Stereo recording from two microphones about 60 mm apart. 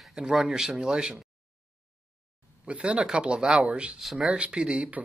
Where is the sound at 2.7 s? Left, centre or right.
Centre.